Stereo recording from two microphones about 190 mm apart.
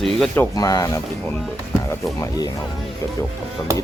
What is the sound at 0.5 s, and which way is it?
Speech, 20° left (ahead or behind).